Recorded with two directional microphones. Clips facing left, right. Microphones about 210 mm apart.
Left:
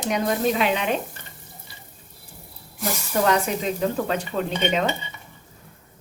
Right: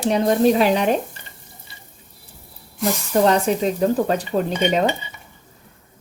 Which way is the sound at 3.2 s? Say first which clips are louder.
Right 4 dB; 35° right (ahead or behind).